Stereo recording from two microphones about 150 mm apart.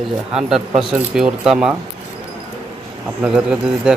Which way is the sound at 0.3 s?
5° right (ahead or behind).